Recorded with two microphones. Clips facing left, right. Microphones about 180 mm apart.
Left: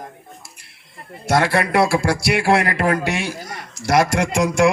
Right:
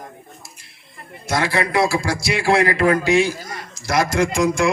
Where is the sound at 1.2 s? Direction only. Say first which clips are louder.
Left 3 dB; 60° left (ahead or behind).